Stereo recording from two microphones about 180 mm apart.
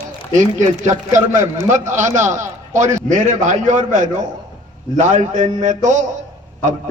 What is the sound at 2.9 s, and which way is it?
A man's voice, 45° right (ahead or behind).